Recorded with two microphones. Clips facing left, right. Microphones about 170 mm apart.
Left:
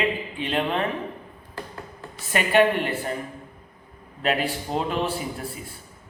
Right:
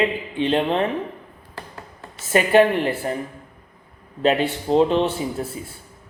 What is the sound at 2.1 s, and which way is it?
Speech, 30° right (ahead or behind).